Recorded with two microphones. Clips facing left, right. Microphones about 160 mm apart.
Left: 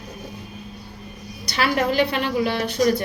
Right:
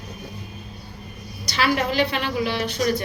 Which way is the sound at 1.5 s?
50° left (ahead or behind).